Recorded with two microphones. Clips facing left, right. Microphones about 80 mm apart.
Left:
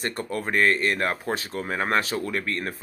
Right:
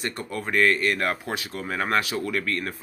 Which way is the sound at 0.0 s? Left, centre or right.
Left.